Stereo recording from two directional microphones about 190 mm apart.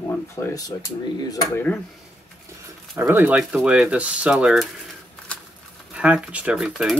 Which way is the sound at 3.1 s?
10° right (ahead or behind).